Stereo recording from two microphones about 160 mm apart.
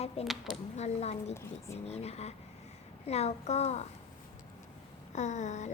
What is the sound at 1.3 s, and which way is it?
Speech, 15° left (ahead or behind).